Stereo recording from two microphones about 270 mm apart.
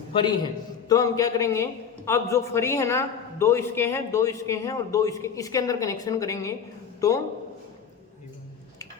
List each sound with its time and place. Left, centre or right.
0.1 s a man's voice: centre